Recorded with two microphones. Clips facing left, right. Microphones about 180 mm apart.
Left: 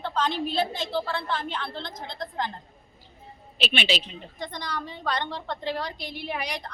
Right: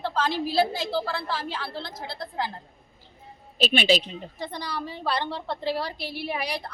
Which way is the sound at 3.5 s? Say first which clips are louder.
Right 5 dB; 40° right (ahead or behind).